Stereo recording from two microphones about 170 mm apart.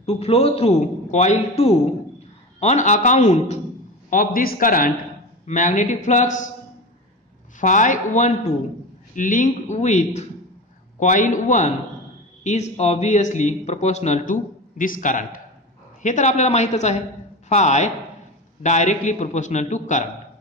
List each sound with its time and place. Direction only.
0.0 s a man's voice: 35° left (ahead or behind)
4.1 s a man's voice: 55° left (ahead or behind)
7.6 s a man's voice: 45° left (ahead or behind)